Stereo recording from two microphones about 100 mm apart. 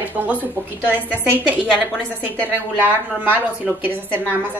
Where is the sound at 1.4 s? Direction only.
15° right (ahead or behind).